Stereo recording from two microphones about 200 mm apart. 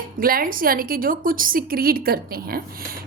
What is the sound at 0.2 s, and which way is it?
A woman's voice, 45° right (ahead or behind).